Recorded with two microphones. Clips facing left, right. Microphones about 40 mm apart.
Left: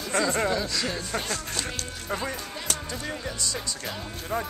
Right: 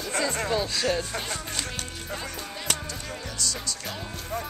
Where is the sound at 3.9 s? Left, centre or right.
Centre.